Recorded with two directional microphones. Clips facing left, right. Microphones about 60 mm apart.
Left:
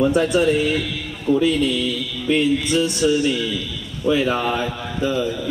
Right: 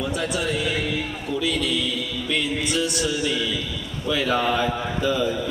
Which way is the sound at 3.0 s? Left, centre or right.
Left.